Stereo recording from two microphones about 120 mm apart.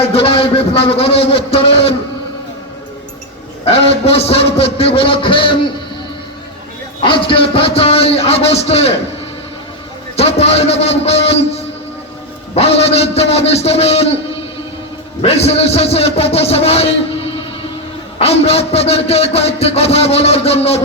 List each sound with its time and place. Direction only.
0.0 s a man's voice: 50° left (ahead or behind)
3.7 s a man's voice: 55° left (ahead or behind)
7.0 s a man's voice: 45° left (ahead or behind)
10.2 s speech: 55° left (ahead or behind)
15.2 s speech: 55° left (ahead or behind)